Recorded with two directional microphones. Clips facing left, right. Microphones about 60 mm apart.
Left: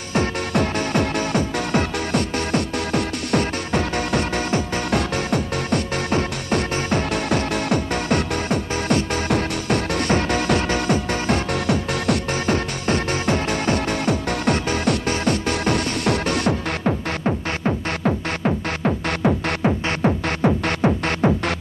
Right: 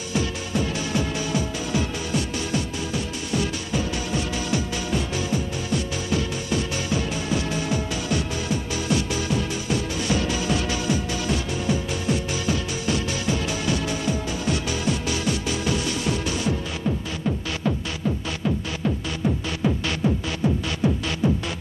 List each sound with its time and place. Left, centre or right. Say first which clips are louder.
0.1 s music: left 5 dB; left
18.0 s music: left 4 dB; left